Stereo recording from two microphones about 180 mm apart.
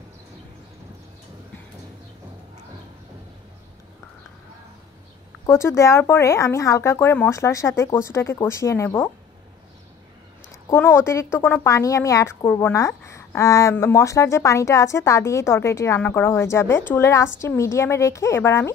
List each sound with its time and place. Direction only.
5.5 s speech: 15° left (ahead or behind)
10.7 s speech: 15° left (ahead or behind)